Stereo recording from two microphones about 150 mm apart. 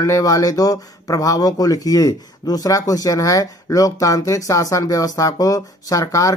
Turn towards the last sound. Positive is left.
turn(degrees=20)  # may be behind; listen again after turning